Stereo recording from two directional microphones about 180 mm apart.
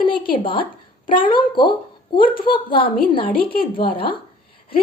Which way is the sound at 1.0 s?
30° left (ahead or behind).